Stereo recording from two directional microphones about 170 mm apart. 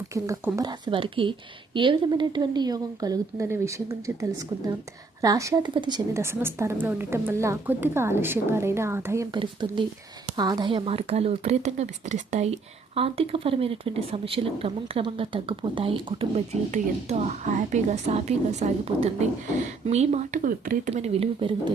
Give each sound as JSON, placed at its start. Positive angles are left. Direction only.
{"t": 0.1, "sound": "speech", "side_deg": -15}
{"t": 6.1, "sound": "a woman's voice", "side_deg": -15}
{"t": 9.3, "sound": "speech", "side_deg": -25}
{"t": 20.9, "sound": "speech", "side_deg": -40}